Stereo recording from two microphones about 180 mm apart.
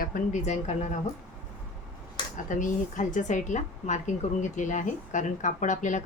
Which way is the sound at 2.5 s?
45° left (ahead or behind).